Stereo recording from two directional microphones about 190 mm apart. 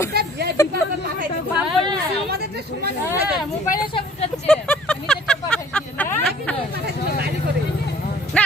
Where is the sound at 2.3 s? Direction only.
55° right (ahead or behind).